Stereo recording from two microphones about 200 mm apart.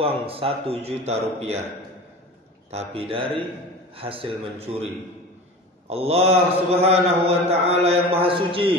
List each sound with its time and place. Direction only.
0.0 s speech: 30° right (ahead or behind)
2.7 s speech: 30° right (ahead or behind)
5.9 s mantra: 30° right (ahead or behind)
8.2 s speech: 25° right (ahead or behind)